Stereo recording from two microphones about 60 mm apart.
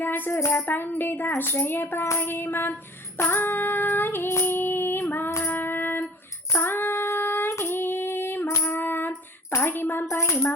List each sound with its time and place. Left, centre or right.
0.0 s speech: left
3.2 s female singing: left
5.5 s a sound: left
6.5 s child singing: left
7.6 s female singing: left
9.5 s a sound: left